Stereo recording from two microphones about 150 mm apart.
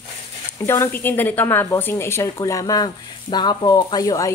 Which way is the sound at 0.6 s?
15° left (ahead or behind).